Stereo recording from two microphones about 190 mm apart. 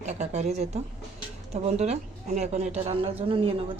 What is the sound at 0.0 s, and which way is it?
A woman's voice, 35° right (ahead or behind).